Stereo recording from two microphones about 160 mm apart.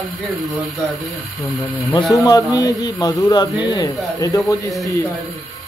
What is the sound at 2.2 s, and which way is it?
A man's voice, 20° left (ahead or behind).